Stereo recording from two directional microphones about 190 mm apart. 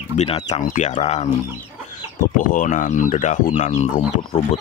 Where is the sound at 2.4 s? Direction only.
45° left (ahead or behind).